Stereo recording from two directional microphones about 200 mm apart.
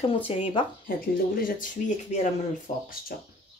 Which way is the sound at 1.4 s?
45° left (ahead or behind).